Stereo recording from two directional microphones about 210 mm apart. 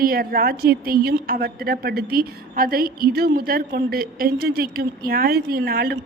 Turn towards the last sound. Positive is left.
turn(degrees=-45)  # may be behind; listen again after turning